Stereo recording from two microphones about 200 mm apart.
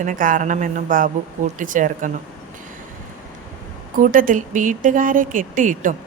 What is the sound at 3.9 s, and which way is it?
Speech, 45° right (ahead or behind).